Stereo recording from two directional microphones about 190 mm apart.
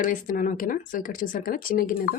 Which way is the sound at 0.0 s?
45° left (ahead or behind).